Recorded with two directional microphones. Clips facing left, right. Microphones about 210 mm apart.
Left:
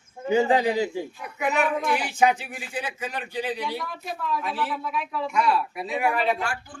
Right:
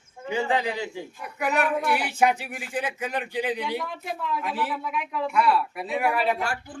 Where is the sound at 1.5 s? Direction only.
5° right (ahead or behind).